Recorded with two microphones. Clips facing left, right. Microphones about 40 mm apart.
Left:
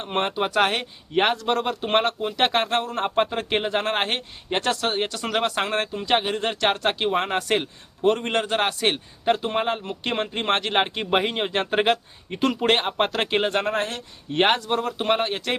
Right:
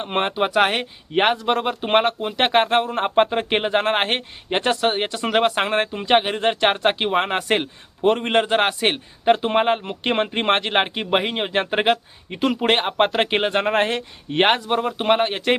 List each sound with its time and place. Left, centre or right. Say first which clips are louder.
0.0 s speech: right 3 dB; right
13.7 s speech: right 6 dB; right
14.3 s speech: right 2 dB; centre